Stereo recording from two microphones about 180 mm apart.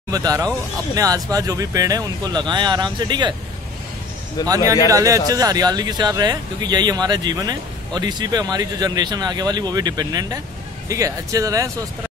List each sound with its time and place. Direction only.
0.1 s speech: 20° right (ahead or behind)
4.4 s speech: 20° left (ahead or behind)
4.8 s speech: 20° right (ahead or behind)